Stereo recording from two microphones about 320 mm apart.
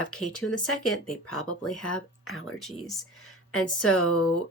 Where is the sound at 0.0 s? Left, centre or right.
Left.